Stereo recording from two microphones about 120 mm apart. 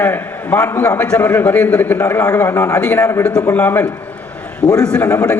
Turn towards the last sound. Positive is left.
turn(degrees=10)  # may be behind; listen again after turning